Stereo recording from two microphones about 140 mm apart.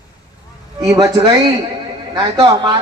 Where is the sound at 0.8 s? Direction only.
25° right (ahead or behind).